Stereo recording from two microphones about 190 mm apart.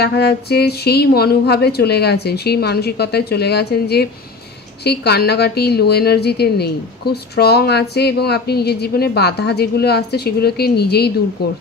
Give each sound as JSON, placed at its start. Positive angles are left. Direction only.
{"t": 0.0, "sound": "a woman's voice", "side_deg": 60}